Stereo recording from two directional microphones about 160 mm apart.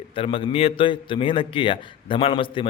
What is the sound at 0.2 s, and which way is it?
A man's voice, 35° left (ahead or behind).